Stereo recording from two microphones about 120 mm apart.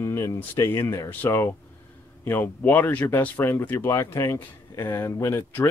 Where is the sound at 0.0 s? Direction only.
25° left (ahead or behind).